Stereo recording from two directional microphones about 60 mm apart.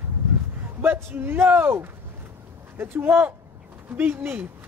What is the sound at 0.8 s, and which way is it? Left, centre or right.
Speech, right.